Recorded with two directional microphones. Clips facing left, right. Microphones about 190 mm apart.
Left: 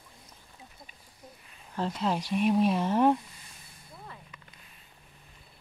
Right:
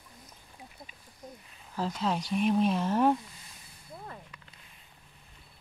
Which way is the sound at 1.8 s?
Centre (ahead or behind).